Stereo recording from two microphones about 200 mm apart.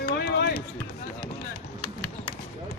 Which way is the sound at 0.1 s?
55° left (ahead or behind).